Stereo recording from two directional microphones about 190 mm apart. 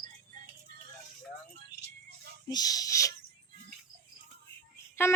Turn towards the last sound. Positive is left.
turn(degrees=15)  # may be behind; listen again after turning